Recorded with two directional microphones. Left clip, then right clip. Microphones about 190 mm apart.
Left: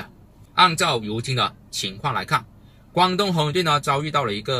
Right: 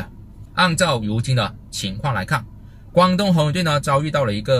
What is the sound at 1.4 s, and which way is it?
Speech, 10° right (ahead or behind).